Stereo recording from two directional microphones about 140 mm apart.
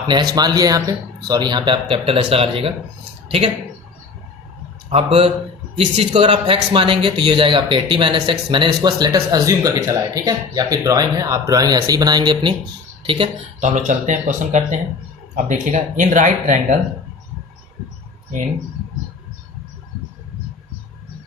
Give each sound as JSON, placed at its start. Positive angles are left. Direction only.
{"t": 0.1, "sound": "speech", "side_deg": -30}
{"t": 4.9, "sound": "a man's voice", "side_deg": -40}
{"t": 13.6, "sound": "speech", "side_deg": -60}